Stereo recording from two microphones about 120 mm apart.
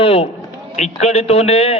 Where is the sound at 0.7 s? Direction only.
70° left (ahead or behind).